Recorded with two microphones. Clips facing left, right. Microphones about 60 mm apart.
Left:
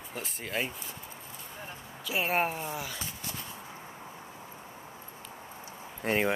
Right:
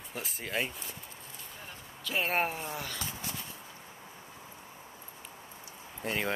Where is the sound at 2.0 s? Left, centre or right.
Centre.